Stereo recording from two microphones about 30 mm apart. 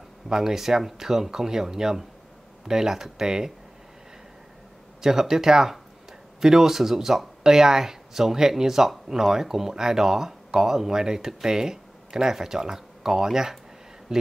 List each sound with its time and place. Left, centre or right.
0.3 s speech: centre
5.0 s speech: centre